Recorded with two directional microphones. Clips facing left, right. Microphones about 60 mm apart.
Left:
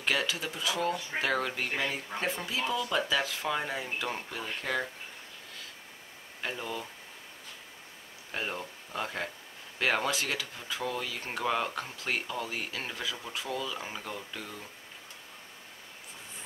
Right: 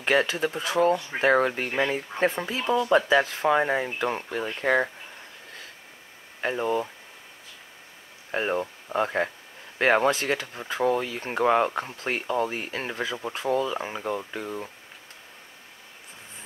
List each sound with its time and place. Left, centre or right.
0.0 s speech: right
6.4 s speech: right
8.3 s speech: right